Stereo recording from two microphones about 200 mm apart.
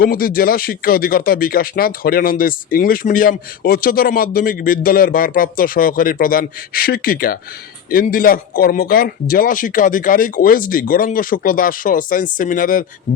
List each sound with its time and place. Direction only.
0.0 s speech: 45° left (ahead or behind)